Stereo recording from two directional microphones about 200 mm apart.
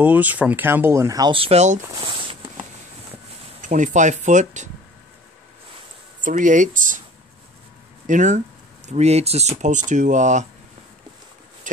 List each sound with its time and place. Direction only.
0.0 s speech: 10° right (ahead or behind); by 2.5 s 25° right (ahead or behind)
3.6 s speech: 40° right (ahead or behind)
6.2 s speech: 40° right (ahead or behind)
8.1 s speech: 40° right (ahead or behind)
11.7 s speech: 40° right (ahead or behind)